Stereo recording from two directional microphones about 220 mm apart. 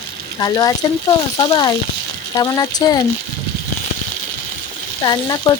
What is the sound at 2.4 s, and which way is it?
Speech, 15° left (ahead or behind).